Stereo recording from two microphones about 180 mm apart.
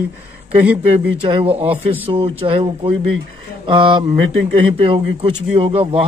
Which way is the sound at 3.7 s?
25° right (ahead or behind).